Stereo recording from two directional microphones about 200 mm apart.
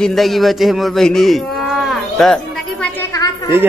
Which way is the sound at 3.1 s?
20° left (ahead or behind).